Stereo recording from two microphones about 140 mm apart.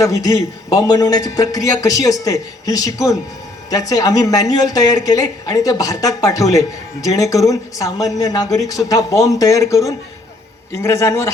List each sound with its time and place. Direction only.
0.0 s a man's voice: 25° left (ahead or behind)